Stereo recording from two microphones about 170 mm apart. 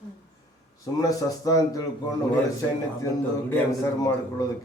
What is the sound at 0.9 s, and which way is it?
Speech, 20° left (ahead or behind).